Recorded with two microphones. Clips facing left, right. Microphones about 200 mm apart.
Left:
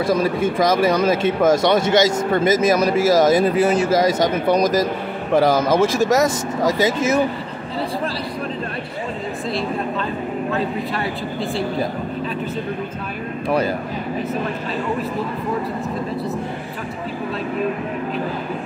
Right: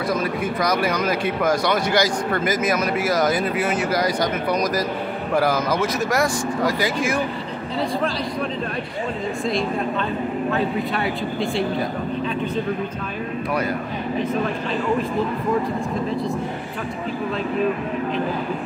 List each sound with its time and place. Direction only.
0.0 s speech: 25° left (ahead or behind)